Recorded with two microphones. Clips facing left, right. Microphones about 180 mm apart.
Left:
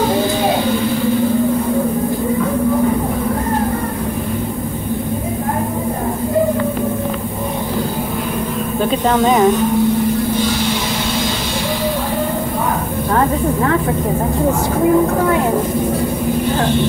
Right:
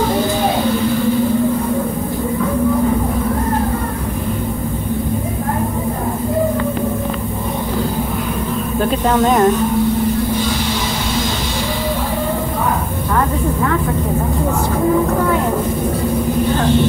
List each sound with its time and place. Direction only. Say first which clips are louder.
9.2 s speech: even; 5° left (ahead or behind)